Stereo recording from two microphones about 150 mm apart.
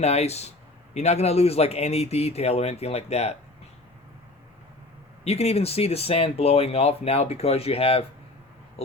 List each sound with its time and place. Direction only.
0.0 s speech: 45° left (ahead or behind)
5.2 s speech: 45° left (ahead or behind)